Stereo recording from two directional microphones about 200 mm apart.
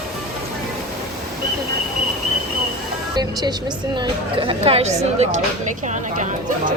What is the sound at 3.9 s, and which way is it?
Speech, 25° right (ahead or behind).